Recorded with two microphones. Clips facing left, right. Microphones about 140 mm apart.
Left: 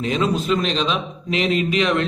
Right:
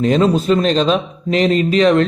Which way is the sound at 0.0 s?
40° right (ahead or behind).